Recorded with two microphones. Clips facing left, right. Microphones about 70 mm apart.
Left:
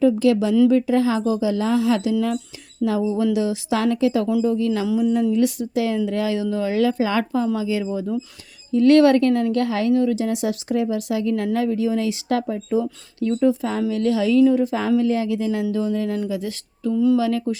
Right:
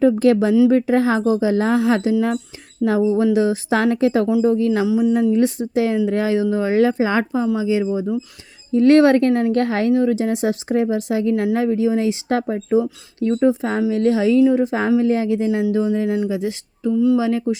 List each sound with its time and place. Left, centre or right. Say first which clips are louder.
0.0 s speech: right 2 dB; right
4.9 s speech: right 3 dB; centre
5.3 s speech: right 2 dB; right
16.9 s speech: right 2 dB; centre
17.2 s speech: right 2 dB; right